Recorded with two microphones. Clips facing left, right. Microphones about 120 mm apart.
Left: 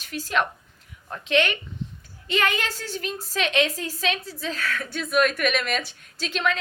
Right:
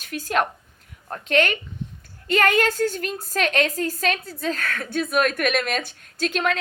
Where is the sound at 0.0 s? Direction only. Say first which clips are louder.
Right 2 dB; 50° right (ahead or behind).